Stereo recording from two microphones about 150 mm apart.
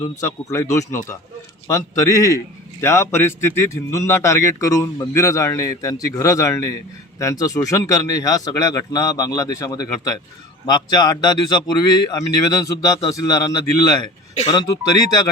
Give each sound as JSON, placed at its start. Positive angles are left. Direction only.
{"t": 0.0, "sound": "speech", "side_deg": 20}
{"t": 14.3, "sound": "speech", "side_deg": 40}